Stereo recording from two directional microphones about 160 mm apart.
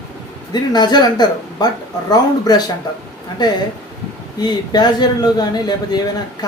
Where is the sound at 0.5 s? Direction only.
25° left (ahead or behind).